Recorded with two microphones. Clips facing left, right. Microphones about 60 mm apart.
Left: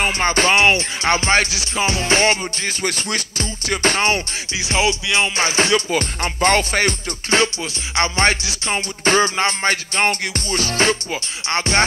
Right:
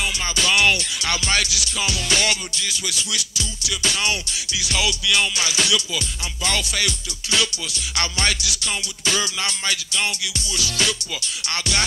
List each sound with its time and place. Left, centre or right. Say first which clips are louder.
0.0 s music: left 7 dB; left